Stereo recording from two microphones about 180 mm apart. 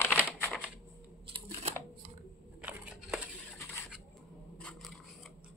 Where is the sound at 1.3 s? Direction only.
35° right (ahead or behind).